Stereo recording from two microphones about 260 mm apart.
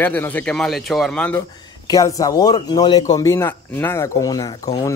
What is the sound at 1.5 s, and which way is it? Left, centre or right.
A man's voice, centre.